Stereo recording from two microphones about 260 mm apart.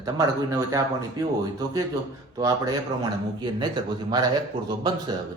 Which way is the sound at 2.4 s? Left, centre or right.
Centre.